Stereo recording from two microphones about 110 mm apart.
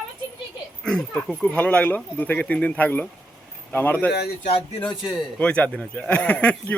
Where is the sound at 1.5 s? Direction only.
15° left (ahead or behind).